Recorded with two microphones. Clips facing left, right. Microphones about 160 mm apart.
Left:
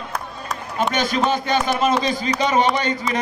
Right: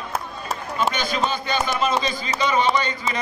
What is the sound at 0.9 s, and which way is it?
Speech, 70° left (ahead or behind).